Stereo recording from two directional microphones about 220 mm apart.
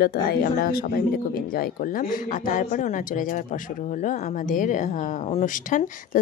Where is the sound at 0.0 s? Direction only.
45° left (ahead or behind).